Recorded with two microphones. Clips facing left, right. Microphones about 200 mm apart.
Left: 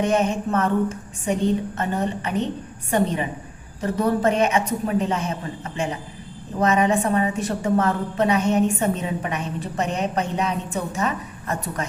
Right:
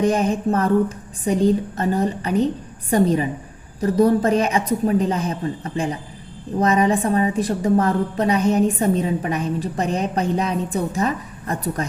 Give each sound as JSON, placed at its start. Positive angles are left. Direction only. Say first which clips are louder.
{"t": 0.0, "sound": "a woman's voice", "louder": "right 2 dB", "side_deg": -35}